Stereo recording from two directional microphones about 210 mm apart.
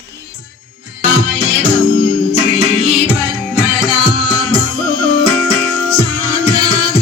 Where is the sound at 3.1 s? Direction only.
5° right (ahead or behind).